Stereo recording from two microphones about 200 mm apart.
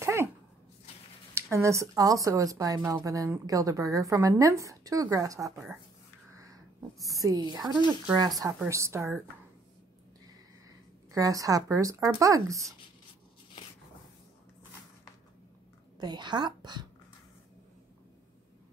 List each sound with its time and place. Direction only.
0.0 s dog: 15° right (ahead or behind)
1.3 s speech: 15° right (ahead or behind)
7.0 s a sound: centre (ahead or behind)
7.2 s speech: 20° right (ahead or behind)
11.1 s speech: 15° right (ahead or behind)
16.0 s speech: 20° right (ahead or behind)